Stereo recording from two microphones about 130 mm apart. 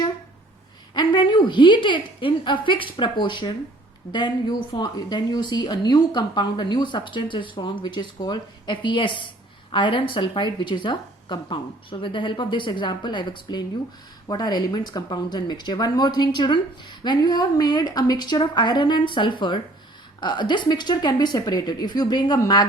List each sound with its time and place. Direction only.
0.9 s speech: 35° left (ahead or behind)